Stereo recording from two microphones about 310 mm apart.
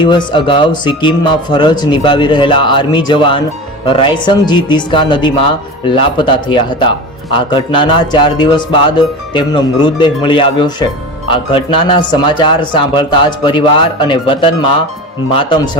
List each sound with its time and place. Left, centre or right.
0.0 s speech: centre